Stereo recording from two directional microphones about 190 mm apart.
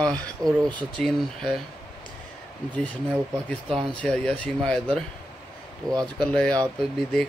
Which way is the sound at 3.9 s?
5° left (ahead or behind).